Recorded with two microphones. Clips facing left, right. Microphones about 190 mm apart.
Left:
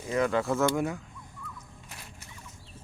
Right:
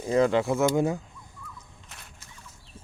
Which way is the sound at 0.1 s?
30° right (ahead or behind).